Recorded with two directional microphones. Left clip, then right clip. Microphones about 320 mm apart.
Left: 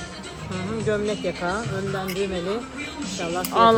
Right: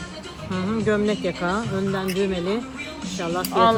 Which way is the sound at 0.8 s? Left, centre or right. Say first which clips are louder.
Right 2 dB; right.